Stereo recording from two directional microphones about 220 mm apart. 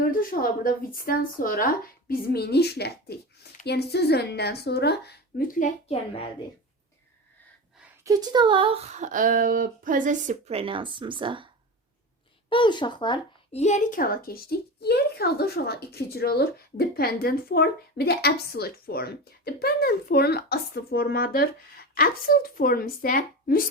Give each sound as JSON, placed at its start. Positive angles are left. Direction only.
{"t": 0.0, "sound": "speech", "side_deg": 40}
{"t": 8.0, "sound": "speech", "side_deg": -15}
{"t": 12.5, "sound": "speech", "side_deg": 20}